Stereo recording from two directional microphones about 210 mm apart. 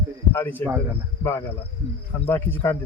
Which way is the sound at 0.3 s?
10° left (ahead or behind).